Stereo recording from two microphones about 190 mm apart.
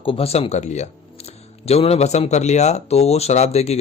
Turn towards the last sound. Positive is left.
turn(degrees=35)  # may be behind; listen again after turning